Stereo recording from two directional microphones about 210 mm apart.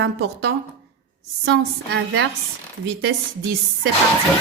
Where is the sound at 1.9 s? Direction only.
60° right (ahead or behind).